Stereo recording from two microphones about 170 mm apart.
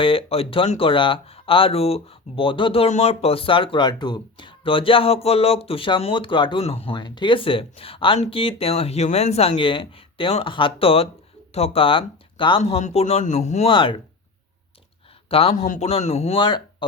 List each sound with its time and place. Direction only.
0.0 s speech: 35° left (ahead or behind)
15.3 s speech: 35° left (ahead or behind)